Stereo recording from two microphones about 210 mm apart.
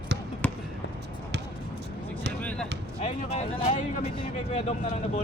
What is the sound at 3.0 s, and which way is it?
Speech, 35° left (ahead or behind).